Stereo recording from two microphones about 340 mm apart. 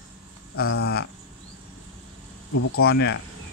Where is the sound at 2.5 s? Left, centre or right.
Left.